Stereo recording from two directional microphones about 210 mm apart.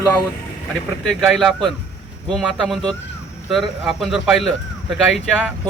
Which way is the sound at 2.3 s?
Centre (ahead or behind).